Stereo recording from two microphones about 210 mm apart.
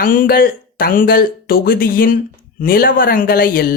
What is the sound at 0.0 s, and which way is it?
Speech, 40° left (ahead or behind).